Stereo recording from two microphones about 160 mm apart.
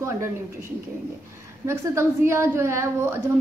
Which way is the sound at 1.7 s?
15° right (ahead or behind).